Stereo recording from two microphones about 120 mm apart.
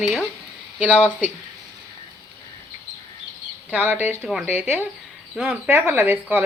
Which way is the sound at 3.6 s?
15° right (ahead or behind).